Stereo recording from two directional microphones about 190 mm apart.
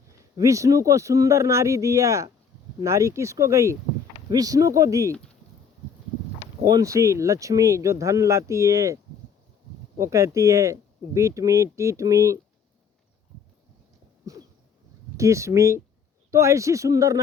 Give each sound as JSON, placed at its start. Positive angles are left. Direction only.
{"t": 0.1, "sound": "speech", "side_deg": -15}
{"t": 6.7, "sound": "speech", "side_deg": -20}
{"t": 10.0, "sound": "speech", "side_deg": -15}
{"t": 15.2, "sound": "speech", "side_deg": -15}